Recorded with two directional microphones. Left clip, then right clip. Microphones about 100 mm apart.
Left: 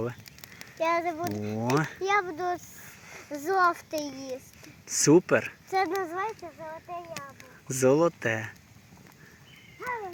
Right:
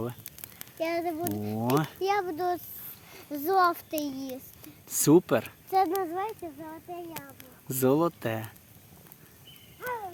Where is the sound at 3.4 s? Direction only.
75° right (ahead or behind).